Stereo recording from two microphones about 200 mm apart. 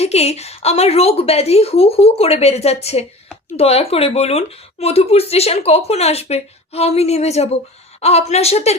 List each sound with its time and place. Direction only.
0.0 s speech: 30° left (ahead or behind)